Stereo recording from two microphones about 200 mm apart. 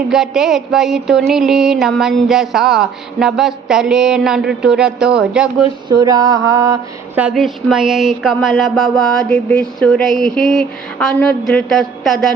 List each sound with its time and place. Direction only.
0.1 s speech: centre (ahead or behind)
5.9 s mantra: 20° right (ahead or behind)
7.2 s speech: 5° right (ahead or behind)